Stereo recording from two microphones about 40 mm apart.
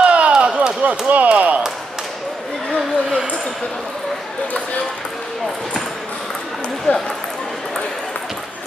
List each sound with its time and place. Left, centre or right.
0.0 s chop: right
0.8 s speech: right
6.9 s a sound: left